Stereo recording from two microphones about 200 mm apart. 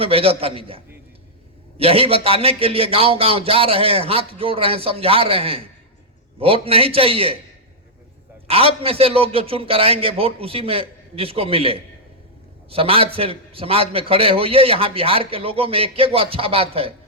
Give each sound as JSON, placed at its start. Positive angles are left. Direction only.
{"t": 0.0, "sound": "a man's voice", "side_deg": -30}
{"t": 1.8, "sound": "a man's voice", "side_deg": -30}
{"t": 8.4, "sound": "a man's voice", "side_deg": -30}